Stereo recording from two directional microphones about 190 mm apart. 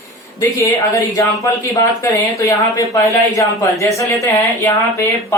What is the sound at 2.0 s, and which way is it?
Speech, 15° left (ahead or behind).